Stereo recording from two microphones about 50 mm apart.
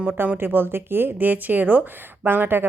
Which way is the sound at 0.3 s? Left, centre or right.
Right.